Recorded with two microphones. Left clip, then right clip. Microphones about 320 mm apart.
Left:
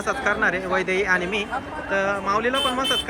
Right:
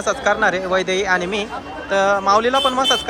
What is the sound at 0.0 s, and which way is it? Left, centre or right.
Speech, centre.